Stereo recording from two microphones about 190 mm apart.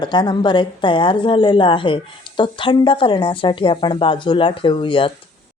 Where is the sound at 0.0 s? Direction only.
25° left (ahead or behind).